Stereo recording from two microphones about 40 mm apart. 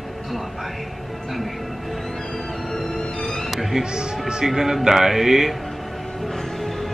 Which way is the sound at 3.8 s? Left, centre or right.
Centre.